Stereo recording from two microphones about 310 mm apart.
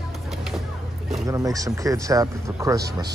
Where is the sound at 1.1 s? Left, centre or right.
Centre.